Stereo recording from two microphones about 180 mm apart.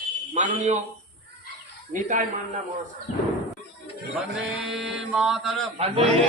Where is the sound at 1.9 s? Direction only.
45° right (ahead or behind).